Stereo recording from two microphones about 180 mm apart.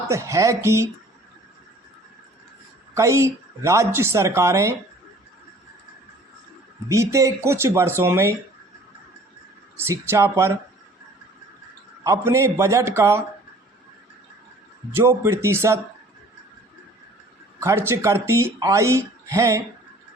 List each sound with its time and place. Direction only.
0.1 s speech: 15° right (ahead or behind)
2.9 s speech: 15° right (ahead or behind)
6.8 s speech: 15° right (ahead or behind)
9.7 s speech: 15° right (ahead or behind)
12.0 s speech: 15° right (ahead or behind)
14.9 s speech: 15° right (ahead or behind)
17.6 s speech: 15° right (ahead or behind)